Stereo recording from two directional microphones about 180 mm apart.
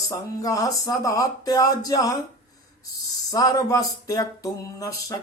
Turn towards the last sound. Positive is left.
turn(degrees=20)  # may be behind; listen again after turning